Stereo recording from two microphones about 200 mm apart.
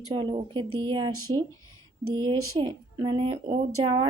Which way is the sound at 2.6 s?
25° right (ahead or behind).